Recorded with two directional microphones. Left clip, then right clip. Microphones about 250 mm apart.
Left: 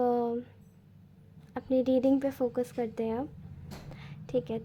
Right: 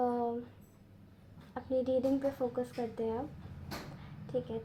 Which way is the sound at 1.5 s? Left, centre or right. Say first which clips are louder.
Left 5 dB; left.